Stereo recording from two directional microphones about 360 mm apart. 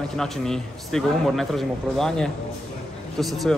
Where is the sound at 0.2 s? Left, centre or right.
Centre.